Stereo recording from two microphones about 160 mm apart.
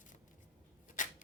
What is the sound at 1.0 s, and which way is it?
Rub, 55° left (ahead or behind).